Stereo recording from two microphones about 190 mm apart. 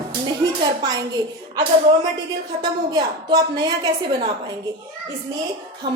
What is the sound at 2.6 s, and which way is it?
A woman's voice, 20° right (ahead or behind).